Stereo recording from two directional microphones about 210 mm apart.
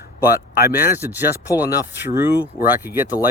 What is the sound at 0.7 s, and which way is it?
Speech, 10° right (ahead or behind).